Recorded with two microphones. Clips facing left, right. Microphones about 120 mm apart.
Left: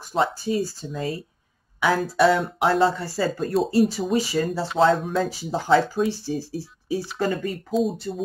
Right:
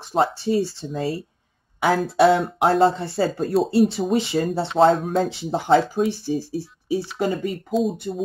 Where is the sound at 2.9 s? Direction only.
25° right (ahead or behind).